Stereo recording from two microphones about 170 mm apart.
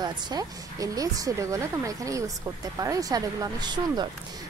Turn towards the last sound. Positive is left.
turn(degrees=-25)  # may be behind; listen again after turning